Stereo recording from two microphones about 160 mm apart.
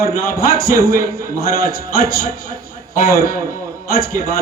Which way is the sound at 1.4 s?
70° left (ahead or behind).